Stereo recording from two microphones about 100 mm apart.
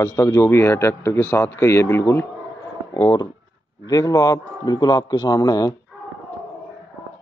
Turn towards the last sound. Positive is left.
turn(degrees=40)  # may be behind; listen again after turning